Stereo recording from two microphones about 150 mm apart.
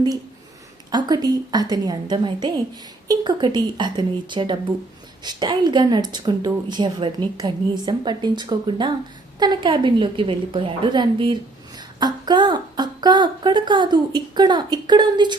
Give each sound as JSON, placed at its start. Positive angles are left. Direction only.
{"t": 0.9, "sound": "a woman's voice", "side_deg": -25}